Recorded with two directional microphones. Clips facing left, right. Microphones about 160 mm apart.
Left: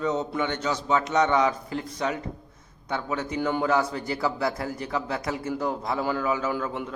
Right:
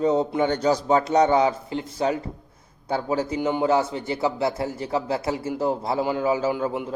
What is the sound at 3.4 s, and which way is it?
Speech, 15° right (ahead or behind).